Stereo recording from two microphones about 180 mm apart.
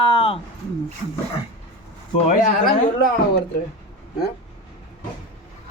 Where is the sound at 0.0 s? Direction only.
30° left (ahead or behind).